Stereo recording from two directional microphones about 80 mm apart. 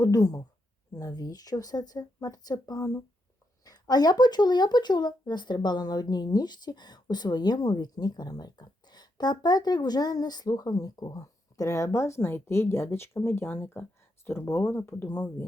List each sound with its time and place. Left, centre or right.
0.0 s speech: left
11.2 s speech: left